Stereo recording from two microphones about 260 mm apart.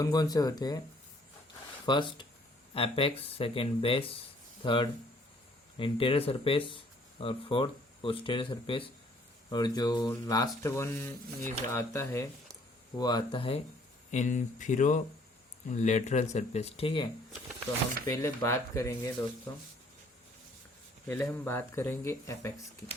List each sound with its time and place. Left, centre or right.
0.0 s speech: centre
1.9 s speech: centre
21.1 s speech: centre